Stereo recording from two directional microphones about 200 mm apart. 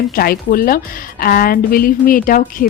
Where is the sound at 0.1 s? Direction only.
45° left (ahead or behind).